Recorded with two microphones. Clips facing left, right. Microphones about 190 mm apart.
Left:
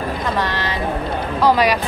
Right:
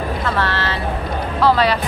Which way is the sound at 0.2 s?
15° left (ahead or behind).